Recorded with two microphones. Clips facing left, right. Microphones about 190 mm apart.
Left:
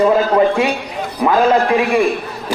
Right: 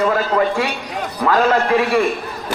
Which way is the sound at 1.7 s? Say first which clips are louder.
Left 2 dB; 15° left (ahead or behind).